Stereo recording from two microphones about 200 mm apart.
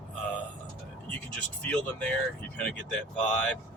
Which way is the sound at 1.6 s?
5° left (ahead or behind).